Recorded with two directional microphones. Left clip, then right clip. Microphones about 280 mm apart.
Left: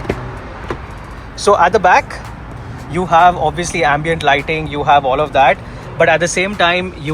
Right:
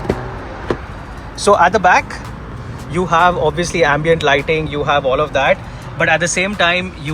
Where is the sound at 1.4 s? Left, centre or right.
Centre.